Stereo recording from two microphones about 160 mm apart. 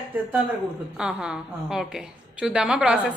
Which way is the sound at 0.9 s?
5° right (ahead or behind).